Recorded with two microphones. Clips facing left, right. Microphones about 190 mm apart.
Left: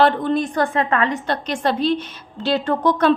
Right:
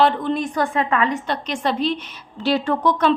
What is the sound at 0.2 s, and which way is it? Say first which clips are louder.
A woman's voice: left 2 dB; 35° left (ahead or behind).